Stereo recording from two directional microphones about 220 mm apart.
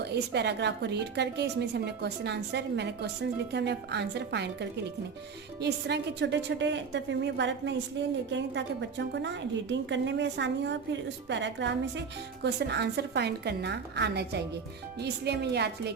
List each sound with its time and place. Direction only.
0.0 s a woman's voice: 50° right (ahead or behind)